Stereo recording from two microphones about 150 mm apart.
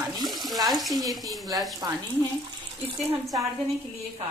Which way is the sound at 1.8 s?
25° right (ahead or behind).